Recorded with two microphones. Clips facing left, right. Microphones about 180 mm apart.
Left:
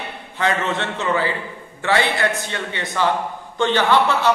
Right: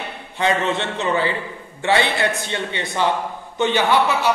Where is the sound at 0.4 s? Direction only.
20° right (ahead or behind).